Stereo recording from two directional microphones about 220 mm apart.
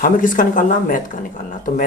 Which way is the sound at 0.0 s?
35° left (ahead or behind).